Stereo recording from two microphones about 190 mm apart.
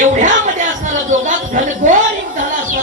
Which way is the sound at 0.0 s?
40° right (ahead or behind).